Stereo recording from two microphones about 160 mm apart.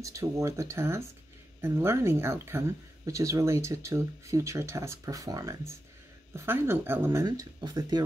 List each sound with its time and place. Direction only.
0.0 s speech: 20° right (ahead or behind)